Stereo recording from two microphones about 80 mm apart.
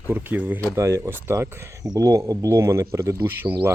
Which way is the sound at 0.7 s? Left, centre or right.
Right.